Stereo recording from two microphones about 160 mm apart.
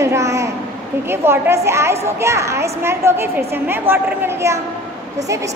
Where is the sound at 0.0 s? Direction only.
20° right (ahead or behind).